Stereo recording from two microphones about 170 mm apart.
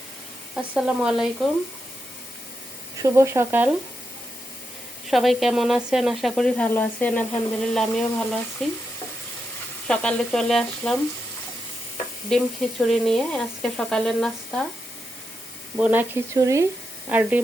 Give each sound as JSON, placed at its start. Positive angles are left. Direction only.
{"t": 0.5, "sound": "speech", "side_deg": -5}
{"t": 3.0, "sound": "speech", "side_deg": -15}
{"t": 5.0, "sound": "speech", "side_deg": 0}
{"t": 9.8, "sound": "speech", "side_deg": 5}
{"t": 12.3, "sound": "speech", "side_deg": 0}
{"t": 15.8, "sound": "speech", "side_deg": -10}